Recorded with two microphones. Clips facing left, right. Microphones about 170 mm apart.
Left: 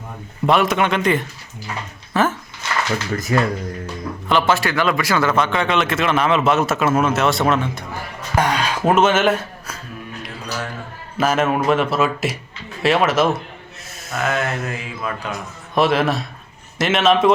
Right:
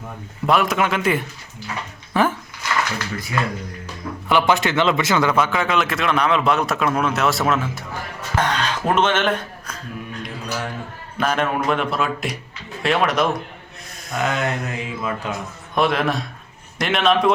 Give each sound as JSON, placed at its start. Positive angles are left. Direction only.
{"t": 0.4, "sound": "a man's voice", "side_deg": 0}
{"t": 2.1, "sound": "a sound", "side_deg": -15}
{"t": 2.6, "sound": "a sound", "side_deg": 25}
{"t": 3.3, "sound": "speech", "side_deg": 45}
{"t": 4.3, "sound": "a man's voice", "side_deg": -15}
{"t": 8.4, "sound": "speech", "side_deg": 10}
{"t": 11.2, "sound": "a man's voice", "side_deg": 5}
{"t": 14.2, "sound": "mantra", "side_deg": -20}
{"t": 15.7, "sound": "a man's voice", "side_deg": 0}